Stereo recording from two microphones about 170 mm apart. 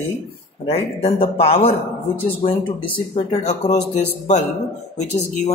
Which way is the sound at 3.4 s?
45° left (ahead or behind).